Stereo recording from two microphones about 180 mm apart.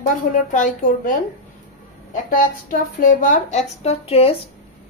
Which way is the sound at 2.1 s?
50° left (ahead or behind).